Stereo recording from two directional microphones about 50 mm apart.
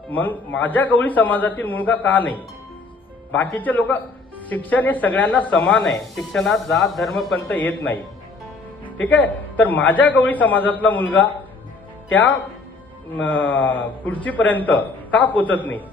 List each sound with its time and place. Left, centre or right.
0.1 s a man's voice: left
3.5 s a man's voice: left
5.5 s speech: centre
7.5 s a man's voice: left
9.0 s a man's voice: left
13.2 s a man's voice: left